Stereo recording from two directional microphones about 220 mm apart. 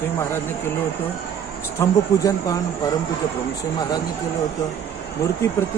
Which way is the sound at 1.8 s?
15° left (ahead or behind).